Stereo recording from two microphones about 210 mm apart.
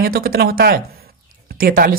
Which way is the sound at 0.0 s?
45° right (ahead or behind).